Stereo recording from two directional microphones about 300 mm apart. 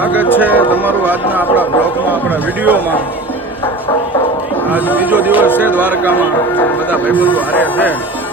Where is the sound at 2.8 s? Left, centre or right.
Centre.